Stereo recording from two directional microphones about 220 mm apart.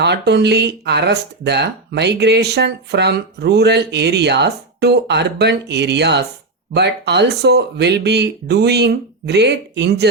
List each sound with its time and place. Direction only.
0.0 s speech: 50° right (ahead or behind)